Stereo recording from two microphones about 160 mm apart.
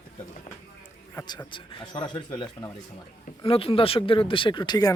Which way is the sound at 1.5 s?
30° left (ahead or behind).